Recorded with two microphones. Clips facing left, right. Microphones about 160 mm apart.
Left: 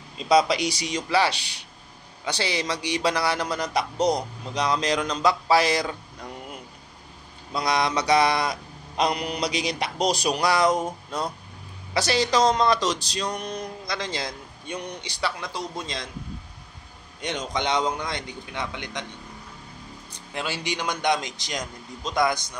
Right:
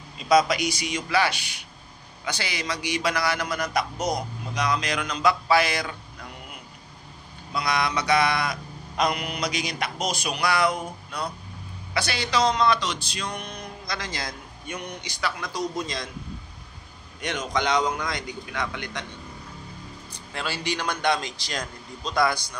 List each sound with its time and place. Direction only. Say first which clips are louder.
0.2 s mantra: even; 30° left (ahead or behind)
7.5 s mantra: left 2 dB; 35° left (ahead or behind)
13.8 s a man's voice: even; 25° left (ahead or behind)
17.2 s a man's voice: right 1 dB; 25° left (ahead or behind)
20.3 s a man's voice: even; 20° left (ahead or behind)